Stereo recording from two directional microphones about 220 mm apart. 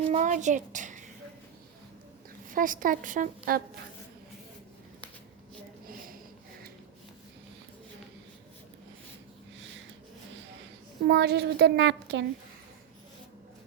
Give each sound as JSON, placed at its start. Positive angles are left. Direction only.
{"t": 0.1, "sound": "a woman's voice", "side_deg": -35}
{"t": 2.5, "sound": "a woman's voice", "side_deg": -40}
{"t": 11.0, "sound": "a woman's voice", "side_deg": -50}